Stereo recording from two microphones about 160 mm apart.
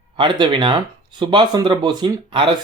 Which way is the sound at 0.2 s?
30° right (ahead or behind).